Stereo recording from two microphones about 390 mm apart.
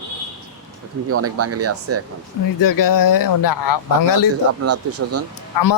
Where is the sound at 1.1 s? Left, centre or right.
Right.